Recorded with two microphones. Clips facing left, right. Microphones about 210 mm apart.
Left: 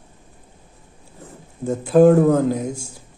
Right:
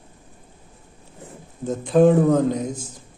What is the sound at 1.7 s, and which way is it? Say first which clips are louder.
A man's voice: left 3 dB; 5° left (ahead or behind).